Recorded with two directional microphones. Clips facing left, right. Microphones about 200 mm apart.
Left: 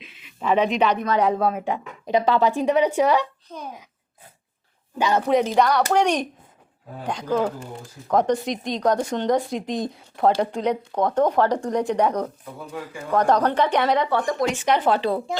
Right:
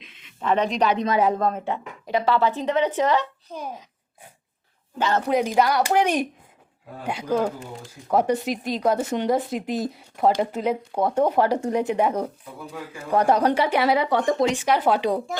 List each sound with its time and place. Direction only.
0.0 s a sound: 5° left (ahead or behind)
0.9 s speech: 15° right (ahead or behind)
1.2 s a woman's voice: 5° left (ahead or behind)
4.9 s a woman's voice: 15° left (ahead or behind)
5.3 s speech: centre (ahead or behind)
14.3 s speech: 25° right (ahead or behind)
14.6 s speech: 5° right (ahead or behind)